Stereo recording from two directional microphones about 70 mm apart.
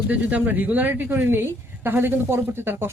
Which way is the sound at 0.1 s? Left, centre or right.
Right.